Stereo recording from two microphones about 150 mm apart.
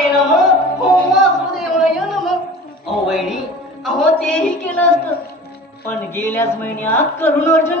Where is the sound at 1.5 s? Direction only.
Centre (ahead or behind).